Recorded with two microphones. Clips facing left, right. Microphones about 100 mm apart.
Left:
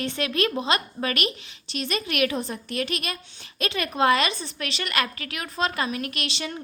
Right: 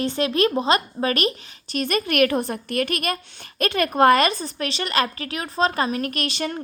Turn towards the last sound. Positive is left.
turn(degrees=-45)  # may be behind; listen again after turning